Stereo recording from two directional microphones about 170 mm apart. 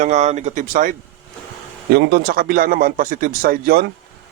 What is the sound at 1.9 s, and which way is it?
Speech, 65° right (ahead or behind).